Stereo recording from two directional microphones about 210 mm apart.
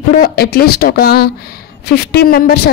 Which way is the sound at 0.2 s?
45° left (ahead or behind).